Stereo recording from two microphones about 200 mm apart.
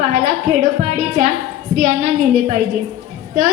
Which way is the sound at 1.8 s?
35° right (ahead or behind).